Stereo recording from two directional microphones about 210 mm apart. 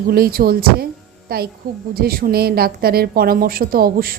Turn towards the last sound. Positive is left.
turn(degrees=-45)  # may be behind; listen again after turning